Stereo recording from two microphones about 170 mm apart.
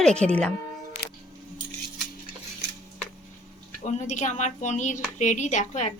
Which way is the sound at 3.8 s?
45° left (ahead or behind).